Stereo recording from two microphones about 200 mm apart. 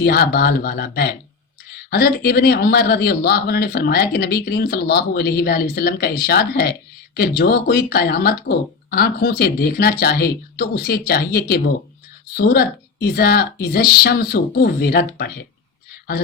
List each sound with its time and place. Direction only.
0.0 s speech: 50° left (ahead or behind)